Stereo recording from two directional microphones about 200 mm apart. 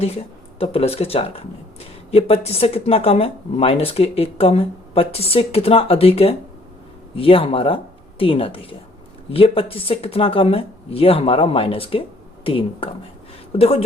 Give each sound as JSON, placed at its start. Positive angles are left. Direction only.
{"t": 0.6, "sound": "speech", "side_deg": 30}